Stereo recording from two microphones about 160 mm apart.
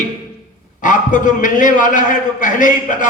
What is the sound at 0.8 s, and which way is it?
A man's voice, 55° left (ahead or behind).